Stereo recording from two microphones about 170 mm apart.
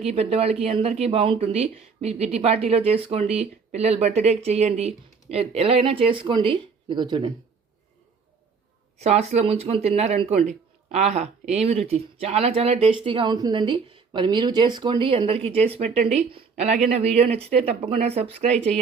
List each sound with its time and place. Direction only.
0.0 s speech: 35° right (ahead or behind)
9.0 s speech: 40° right (ahead or behind)